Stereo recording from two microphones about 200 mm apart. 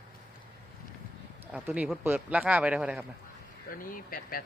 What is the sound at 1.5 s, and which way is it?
A man's voice, 5° right (ahead or behind).